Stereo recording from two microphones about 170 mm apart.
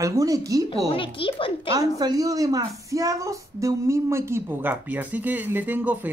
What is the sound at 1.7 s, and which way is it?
A woman's voice, 20° right (ahead or behind).